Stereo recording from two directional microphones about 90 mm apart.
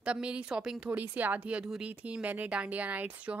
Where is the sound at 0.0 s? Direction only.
15° right (ahead or behind).